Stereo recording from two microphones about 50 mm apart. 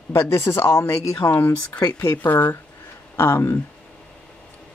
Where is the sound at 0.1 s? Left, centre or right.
Left.